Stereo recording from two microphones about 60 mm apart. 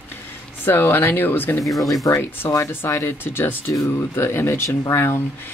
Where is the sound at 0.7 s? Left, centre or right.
Left.